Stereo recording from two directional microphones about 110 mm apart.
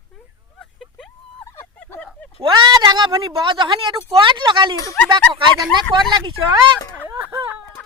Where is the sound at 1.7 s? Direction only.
20° left (ahead or behind).